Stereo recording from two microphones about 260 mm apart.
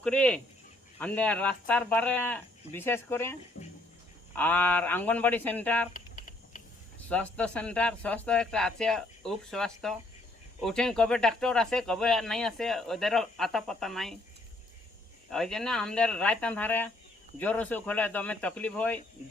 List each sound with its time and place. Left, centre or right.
0.0 s speech: centre
3.6 s a sound: left
4.4 s speech: centre
7.1 s speech: centre
15.3 s speech: centre